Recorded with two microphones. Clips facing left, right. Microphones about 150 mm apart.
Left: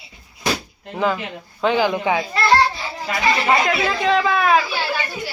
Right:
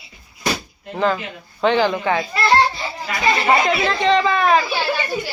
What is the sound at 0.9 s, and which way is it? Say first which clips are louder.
Speech: right 1 dB; 5° left (ahead or behind).